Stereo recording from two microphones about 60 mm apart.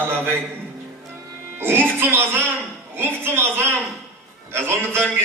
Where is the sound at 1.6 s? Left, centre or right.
Right.